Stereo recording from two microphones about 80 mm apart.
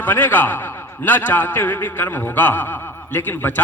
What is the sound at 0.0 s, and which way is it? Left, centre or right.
A man's voice, left.